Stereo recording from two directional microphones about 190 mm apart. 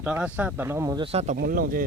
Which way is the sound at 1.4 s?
50° right (ahead or behind).